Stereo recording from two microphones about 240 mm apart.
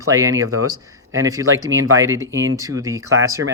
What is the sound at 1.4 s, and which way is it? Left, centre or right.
Speech, right.